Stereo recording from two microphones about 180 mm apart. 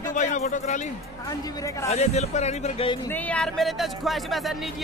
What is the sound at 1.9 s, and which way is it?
Speech, 40° left (ahead or behind).